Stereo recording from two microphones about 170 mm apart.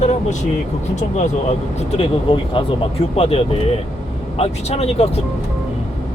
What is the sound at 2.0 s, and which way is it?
Speech, 30° left (ahead or behind).